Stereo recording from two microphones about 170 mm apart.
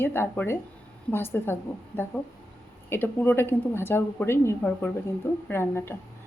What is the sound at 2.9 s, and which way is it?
A woman's voice, 10° left (ahead or behind).